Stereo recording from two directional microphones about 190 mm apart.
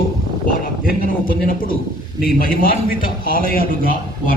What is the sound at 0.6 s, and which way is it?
A man's voice, 45° left (ahead or behind).